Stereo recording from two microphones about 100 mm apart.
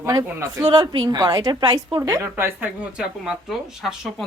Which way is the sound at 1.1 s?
40° right (ahead or behind).